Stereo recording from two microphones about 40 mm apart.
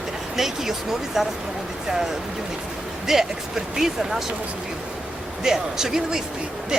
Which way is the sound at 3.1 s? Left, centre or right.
Centre.